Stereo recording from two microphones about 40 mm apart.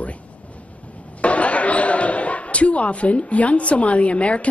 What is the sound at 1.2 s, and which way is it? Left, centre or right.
Speech, left.